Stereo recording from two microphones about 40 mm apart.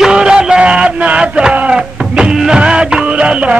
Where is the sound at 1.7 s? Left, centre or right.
Centre.